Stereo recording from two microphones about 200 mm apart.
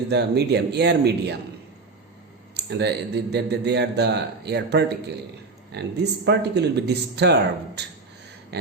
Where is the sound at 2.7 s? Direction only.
60° right (ahead or behind).